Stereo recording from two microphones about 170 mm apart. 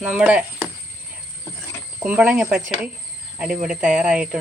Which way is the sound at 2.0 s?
10° right (ahead or behind).